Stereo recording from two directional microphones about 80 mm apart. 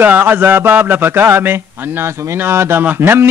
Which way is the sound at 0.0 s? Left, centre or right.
Right.